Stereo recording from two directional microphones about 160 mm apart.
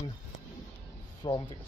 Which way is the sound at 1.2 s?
30° left (ahead or behind).